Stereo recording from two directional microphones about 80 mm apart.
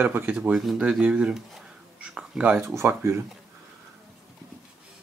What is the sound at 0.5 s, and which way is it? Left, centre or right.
Speech, centre.